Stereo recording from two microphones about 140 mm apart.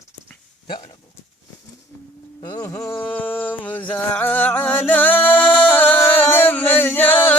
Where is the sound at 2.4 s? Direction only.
25° left (ahead or behind).